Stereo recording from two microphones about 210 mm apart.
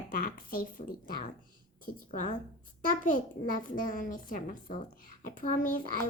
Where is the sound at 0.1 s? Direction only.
40° left (ahead or behind).